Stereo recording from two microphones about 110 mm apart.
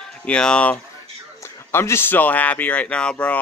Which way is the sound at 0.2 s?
10° left (ahead or behind).